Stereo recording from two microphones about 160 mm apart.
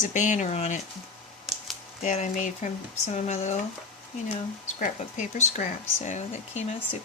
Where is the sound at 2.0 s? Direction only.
45° left (ahead or behind).